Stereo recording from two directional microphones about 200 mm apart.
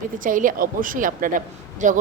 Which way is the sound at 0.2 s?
40° right (ahead or behind).